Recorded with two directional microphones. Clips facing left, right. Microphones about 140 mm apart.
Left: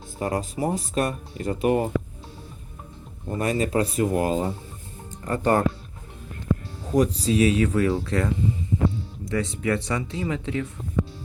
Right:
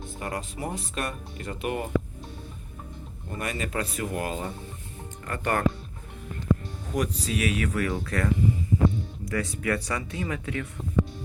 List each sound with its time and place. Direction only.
0.2 s speech: 30° left (ahead or behind)
3.2 s speech: 30° left (ahead or behind)
6.9 s speech: 30° left (ahead or behind)